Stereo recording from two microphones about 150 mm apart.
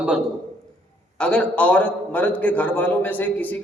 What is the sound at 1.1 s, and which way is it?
A man's voice, 5° left (ahead or behind).